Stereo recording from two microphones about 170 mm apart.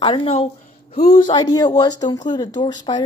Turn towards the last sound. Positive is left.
turn(degrees=25)  # may be behind; listen again after turning